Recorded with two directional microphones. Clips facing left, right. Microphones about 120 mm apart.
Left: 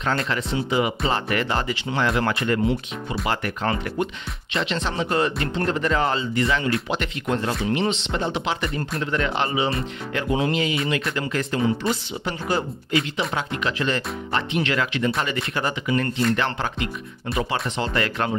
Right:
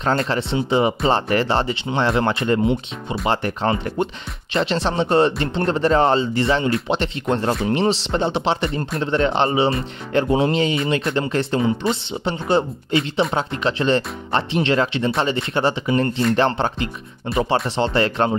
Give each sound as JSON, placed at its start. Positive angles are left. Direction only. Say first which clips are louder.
{"t": 0.0, "sound": "speech", "louder": "right 4 dB", "side_deg": -30}